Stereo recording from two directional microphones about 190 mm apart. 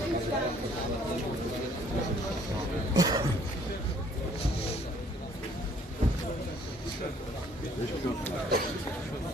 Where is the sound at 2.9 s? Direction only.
20° right (ahead or behind).